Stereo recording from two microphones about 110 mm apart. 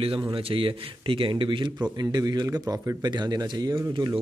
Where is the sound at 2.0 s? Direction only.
40° right (ahead or behind).